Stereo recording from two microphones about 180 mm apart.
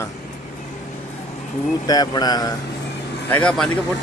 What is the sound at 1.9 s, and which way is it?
Mantra, 20° left (ahead or behind).